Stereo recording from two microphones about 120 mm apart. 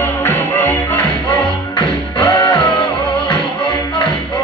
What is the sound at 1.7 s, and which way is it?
Music, 45° left (ahead or behind).